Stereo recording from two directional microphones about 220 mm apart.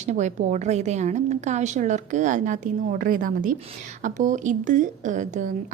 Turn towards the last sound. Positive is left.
turn(degrees=-35)  # may be behind; listen again after turning